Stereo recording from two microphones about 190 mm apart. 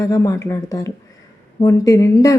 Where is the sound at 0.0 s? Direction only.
15° left (ahead or behind).